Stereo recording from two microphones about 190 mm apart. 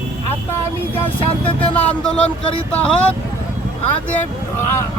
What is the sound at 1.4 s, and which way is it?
Speech, 5° left (ahead or behind).